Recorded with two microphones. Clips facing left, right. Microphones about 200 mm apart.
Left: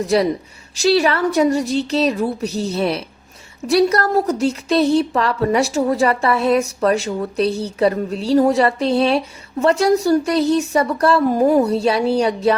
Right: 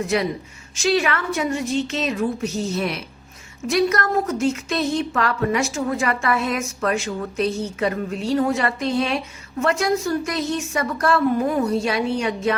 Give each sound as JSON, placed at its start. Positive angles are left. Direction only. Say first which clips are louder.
{"t": 0.0, "sound": "a woman's voice", "louder": "left 5 dB", "side_deg": 35}